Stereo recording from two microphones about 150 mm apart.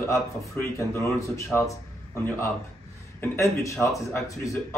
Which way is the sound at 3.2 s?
20° left (ahead or behind).